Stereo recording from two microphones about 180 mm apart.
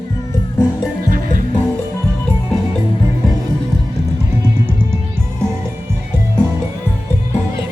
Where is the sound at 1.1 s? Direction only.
50° right (ahead or behind).